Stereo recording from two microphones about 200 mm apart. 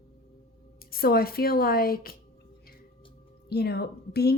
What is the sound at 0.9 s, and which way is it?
A woman's voice, 50° left (ahead or behind).